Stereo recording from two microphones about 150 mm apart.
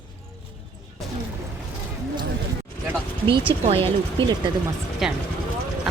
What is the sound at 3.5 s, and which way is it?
Speech, 40° right (ahead or behind).